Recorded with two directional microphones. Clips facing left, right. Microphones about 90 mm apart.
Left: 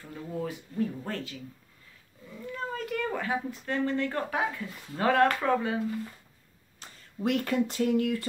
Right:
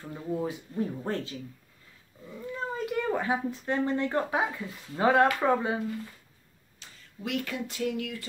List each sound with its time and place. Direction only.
0.4 s speech: 25° right (ahead or behind)
6.8 s speech: 40° left (ahead or behind)